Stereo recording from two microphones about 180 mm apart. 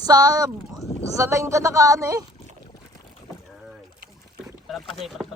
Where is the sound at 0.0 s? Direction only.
20° right (ahead or behind).